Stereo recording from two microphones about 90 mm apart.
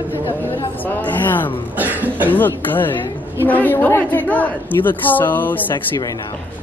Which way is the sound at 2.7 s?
20° left (ahead or behind).